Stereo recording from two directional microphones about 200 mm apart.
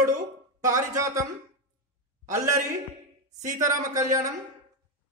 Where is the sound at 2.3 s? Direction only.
15° right (ahead or behind).